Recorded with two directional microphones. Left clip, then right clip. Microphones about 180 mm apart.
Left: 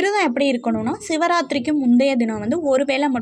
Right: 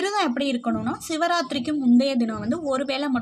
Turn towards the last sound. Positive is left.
turn(degrees=15)  # may be behind; listen again after turning